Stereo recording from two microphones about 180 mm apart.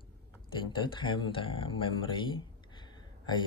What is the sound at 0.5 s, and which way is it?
Speech, 25° left (ahead or behind).